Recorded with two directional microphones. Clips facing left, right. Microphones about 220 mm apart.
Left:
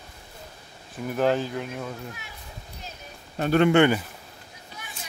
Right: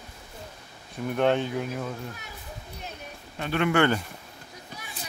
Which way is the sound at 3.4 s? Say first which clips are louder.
Left 7 dB; 40° left (ahead or behind).